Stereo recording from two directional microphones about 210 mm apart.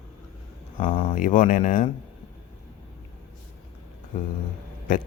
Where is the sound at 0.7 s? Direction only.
40° left (ahead or behind).